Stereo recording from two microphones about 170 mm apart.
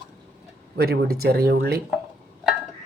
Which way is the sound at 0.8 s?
65° right (ahead or behind).